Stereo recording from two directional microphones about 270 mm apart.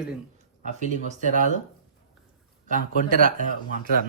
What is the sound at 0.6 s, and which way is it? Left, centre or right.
Speech, right.